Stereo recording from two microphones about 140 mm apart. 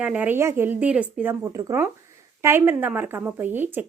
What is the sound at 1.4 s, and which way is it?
A woman's voice, 25° right (ahead or behind).